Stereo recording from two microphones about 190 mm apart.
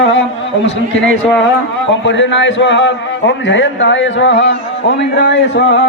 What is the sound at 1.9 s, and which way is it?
A man's voice, 75° left (ahead or behind).